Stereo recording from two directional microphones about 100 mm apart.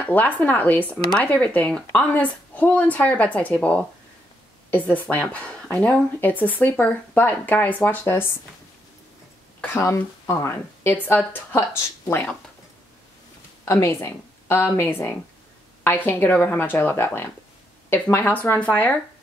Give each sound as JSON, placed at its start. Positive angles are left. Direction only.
{"t": 0.0, "sound": "speech", "side_deg": 15}
{"t": 9.7, "sound": "speech", "side_deg": 30}
{"t": 13.7, "sound": "speech", "side_deg": 30}